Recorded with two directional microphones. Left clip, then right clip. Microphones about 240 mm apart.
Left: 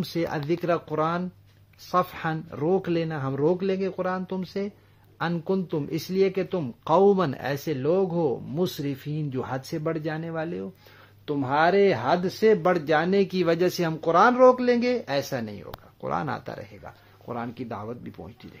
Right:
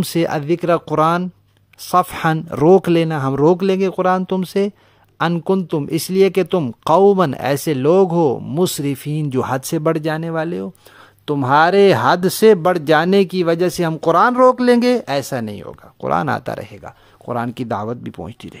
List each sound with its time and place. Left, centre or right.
0.0 s speech: right